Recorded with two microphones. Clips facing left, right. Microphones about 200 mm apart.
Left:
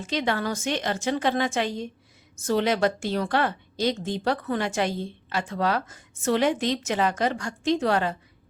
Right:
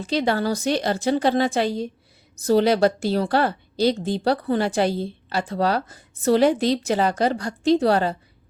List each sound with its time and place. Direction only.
0.0 s a woman's voice: 35° right (ahead or behind)